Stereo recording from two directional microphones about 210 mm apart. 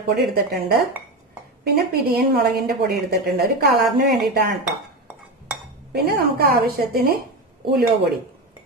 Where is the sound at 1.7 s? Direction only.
50° right (ahead or behind).